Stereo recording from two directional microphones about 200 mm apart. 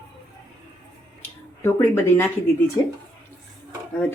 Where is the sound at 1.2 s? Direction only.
10° left (ahead or behind).